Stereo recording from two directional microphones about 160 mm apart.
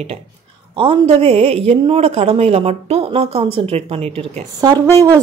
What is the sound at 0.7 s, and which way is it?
A woman's voice, 35° right (ahead or behind).